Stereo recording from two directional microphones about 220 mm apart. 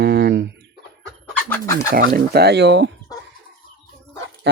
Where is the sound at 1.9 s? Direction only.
40° right (ahead or behind).